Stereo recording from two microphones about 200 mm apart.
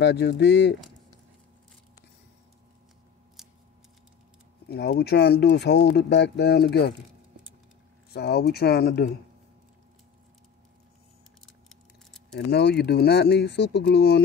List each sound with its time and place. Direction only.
0.0 s speech: 55° left (ahead or behind)
3.4 s scissors: centre (ahead or behind)
4.6 s speech: 55° left (ahead or behind)
8.1 s speech: 55° left (ahead or behind)
11.7 s a sound: centre (ahead or behind)
12.4 s speech: 55° left (ahead or behind)